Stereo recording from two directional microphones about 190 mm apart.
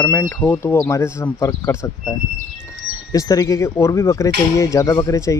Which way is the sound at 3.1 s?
20° left (ahead or behind).